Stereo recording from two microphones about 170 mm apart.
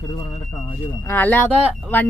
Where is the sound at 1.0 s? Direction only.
10° left (ahead or behind).